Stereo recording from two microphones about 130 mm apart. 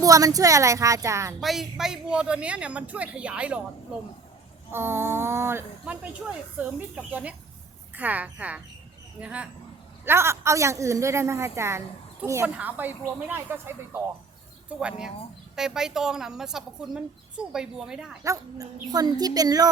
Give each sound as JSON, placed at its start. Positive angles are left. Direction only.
{"t": 0.0, "sound": "a woman's voice", "side_deg": -25}
{"t": 1.4, "sound": "speech", "side_deg": 0}
{"t": 4.7, "sound": "speech", "side_deg": -15}
{"t": 10.1, "sound": "a woman's voice", "side_deg": -20}
{"t": 14.8, "sound": "a woman's voice", "side_deg": -5}
{"t": 18.2, "sound": "a woman's voice", "side_deg": -25}